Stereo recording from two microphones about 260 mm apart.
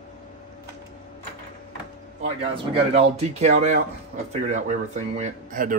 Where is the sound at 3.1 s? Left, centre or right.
Right.